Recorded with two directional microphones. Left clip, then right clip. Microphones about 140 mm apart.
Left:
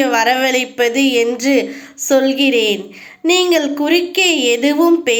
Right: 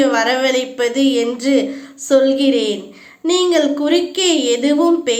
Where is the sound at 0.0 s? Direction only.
25° left (ahead or behind).